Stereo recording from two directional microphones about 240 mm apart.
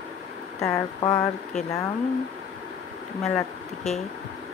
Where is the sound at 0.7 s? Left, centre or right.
Centre.